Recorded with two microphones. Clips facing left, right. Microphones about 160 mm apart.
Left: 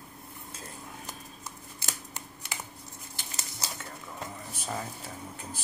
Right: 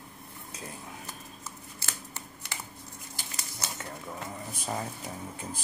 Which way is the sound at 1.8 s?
15° left (ahead or behind).